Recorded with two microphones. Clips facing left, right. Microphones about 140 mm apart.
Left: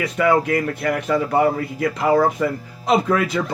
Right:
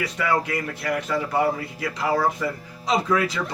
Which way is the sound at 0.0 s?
55° left (ahead or behind).